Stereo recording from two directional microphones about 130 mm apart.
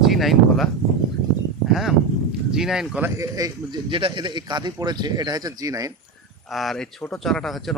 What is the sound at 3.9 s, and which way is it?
Speech, 40° right (ahead or behind).